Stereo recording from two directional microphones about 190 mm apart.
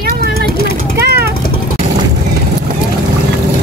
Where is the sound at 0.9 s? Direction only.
55° right (ahead or behind).